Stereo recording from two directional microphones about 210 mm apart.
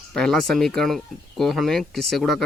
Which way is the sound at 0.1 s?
Centre (ahead or behind).